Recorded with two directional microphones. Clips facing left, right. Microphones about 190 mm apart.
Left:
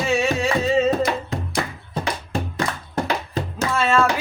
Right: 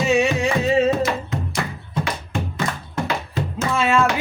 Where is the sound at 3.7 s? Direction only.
15° right (ahead or behind).